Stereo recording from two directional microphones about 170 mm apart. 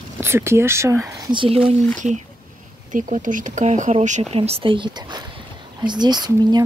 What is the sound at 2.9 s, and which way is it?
Speech, 50° right (ahead or behind).